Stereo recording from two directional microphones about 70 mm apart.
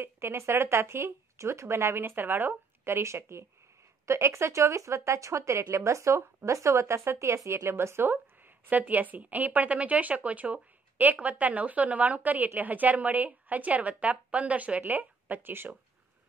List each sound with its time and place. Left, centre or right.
0.0 s speech: right